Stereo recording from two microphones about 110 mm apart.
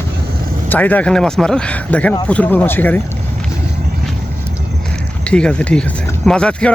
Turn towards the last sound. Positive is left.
turn(degrees=10)  # may be behind; listen again after turning